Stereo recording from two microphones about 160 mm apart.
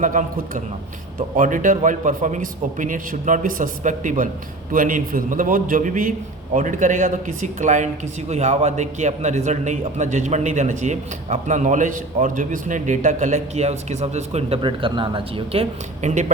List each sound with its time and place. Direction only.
0.0 s a man's voice: 55° right (ahead or behind); by 15.6 s 35° right (ahead or behind)
16.0 s speech: 45° right (ahead or behind)